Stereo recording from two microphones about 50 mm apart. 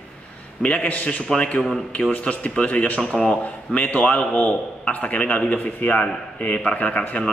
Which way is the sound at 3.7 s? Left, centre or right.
Left.